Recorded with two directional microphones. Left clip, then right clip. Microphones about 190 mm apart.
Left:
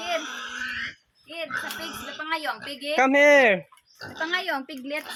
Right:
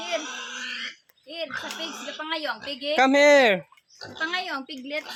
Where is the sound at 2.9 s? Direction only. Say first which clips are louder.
Even; 15° right (ahead or behind).